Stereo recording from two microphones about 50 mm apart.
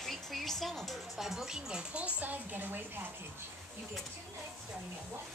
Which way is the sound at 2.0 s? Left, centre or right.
Right.